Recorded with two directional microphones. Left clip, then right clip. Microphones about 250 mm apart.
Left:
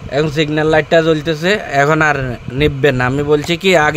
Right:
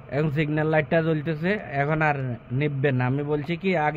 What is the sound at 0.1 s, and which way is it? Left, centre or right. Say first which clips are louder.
Speech: left 11 dB; left.